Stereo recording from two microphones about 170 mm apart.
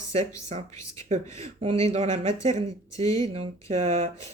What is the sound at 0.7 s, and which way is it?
Speech, 20° left (ahead or behind).